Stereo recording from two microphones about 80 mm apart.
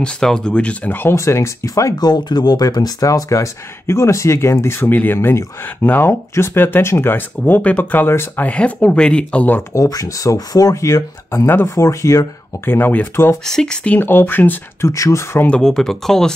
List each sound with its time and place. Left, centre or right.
0.0 s speech: centre
1.0 s speech: left
2.0 s speech: left
8.5 s speech: centre
9.8 s speech: left
12.6 s speech: left
13.5 s speech: centre
13.8 s speech: left
14.8 s speech: left
15.5 s speech: centre